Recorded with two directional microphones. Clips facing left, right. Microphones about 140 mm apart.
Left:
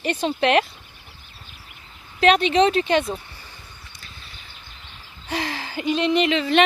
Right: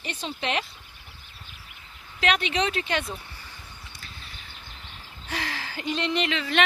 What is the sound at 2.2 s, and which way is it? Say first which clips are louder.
Speech: left 9 dB; 30° left (ahead or behind).